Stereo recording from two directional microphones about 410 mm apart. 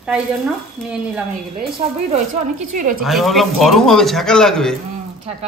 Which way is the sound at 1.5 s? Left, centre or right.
Centre.